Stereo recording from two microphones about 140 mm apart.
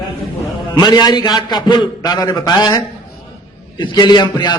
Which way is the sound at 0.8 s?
30° left (ahead or behind).